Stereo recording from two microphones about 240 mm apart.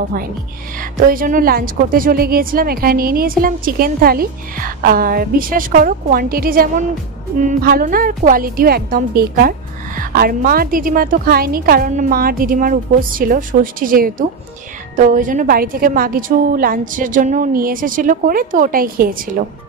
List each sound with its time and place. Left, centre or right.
0.9 s speech: right